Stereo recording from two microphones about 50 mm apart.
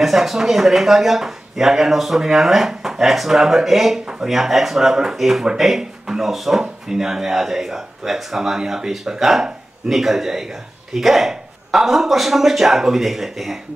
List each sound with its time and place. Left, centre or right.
0.0 s speech: centre
4.0 s speech: centre
4.3 s speech: centre